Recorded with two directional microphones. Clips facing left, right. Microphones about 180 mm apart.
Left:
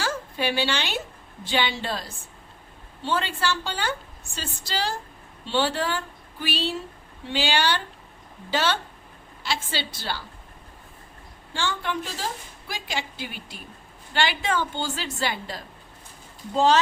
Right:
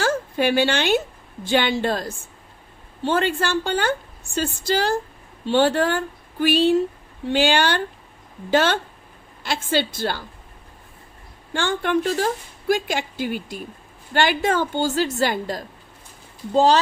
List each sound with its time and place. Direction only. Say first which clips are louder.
0.0 s a woman's voice: right 7 dB; 50° right (ahead or behind)
11.5 s a woman's voice: right 7 dB; 55° right (ahead or behind); by 16.8 s 35° right (ahead or behind)